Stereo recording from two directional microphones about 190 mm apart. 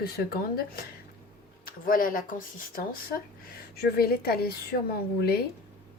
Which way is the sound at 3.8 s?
55° left (ahead or behind).